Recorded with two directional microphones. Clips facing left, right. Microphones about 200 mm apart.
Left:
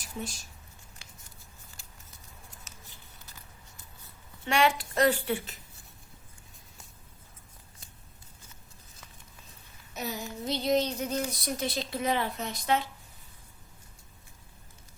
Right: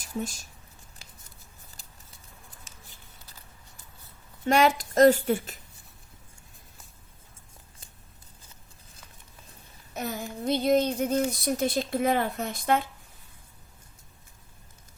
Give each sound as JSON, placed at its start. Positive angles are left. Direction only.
{"t": 0.0, "sound": "a sound", "side_deg": -45}
{"t": 4.4, "sound": "a woman's voice", "side_deg": -40}
{"t": 9.9, "sound": "speech", "side_deg": -50}